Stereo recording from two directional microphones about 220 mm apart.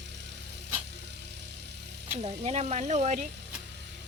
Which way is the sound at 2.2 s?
30° right (ahead or behind).